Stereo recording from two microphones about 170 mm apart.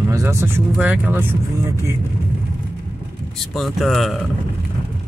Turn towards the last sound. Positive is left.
turn(degrees=0)  # may be behind; listen again after turning